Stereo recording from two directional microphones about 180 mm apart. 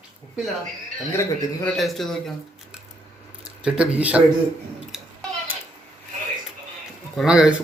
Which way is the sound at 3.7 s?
5° right (ahead or behind).